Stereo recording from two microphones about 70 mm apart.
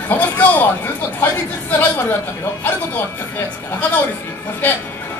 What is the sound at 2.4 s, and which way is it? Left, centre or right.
Speech, left.